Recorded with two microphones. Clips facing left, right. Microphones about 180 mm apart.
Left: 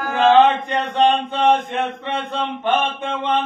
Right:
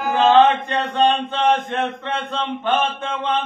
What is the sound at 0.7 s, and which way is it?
Mantra, 15° left (ahead or behind).